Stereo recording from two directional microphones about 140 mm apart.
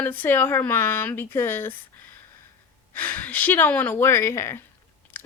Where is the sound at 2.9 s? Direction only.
10° left (ahead or behind).